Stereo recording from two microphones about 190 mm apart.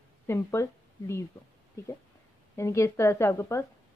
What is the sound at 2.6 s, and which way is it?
A woman's voice, 15° left (ahead or behind).